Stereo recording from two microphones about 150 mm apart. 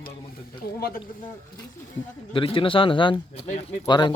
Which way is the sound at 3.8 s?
30° left (ahead or behind).